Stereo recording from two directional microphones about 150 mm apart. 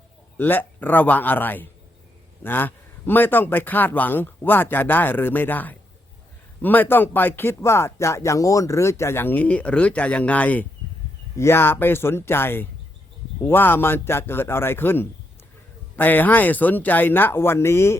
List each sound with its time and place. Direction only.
0.3 s speech: 15° left (ahead or behind)